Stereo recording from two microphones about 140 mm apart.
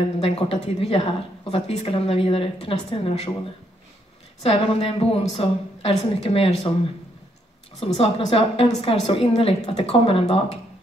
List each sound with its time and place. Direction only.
0.2 s a woman's voice: 45° left (ahead or behind)
4.4 s a woman's voice: 45° left (ahead or behind)
7.8 s a woman's voice: 45° left (ahead or behind)